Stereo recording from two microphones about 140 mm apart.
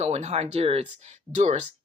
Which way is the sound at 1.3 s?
55° right (ahead or behind).